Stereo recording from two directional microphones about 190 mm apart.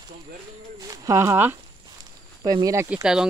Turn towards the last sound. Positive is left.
turn(degrees=-5)  # may be behind; listen again after turning